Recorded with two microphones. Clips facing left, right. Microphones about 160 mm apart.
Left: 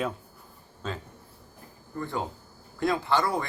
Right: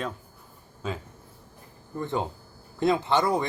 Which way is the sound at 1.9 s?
20° right (ahead or behind).